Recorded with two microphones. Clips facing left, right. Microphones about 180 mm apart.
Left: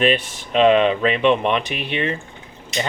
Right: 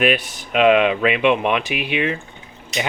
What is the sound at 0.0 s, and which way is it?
Speech, 5° right (ahead or behind).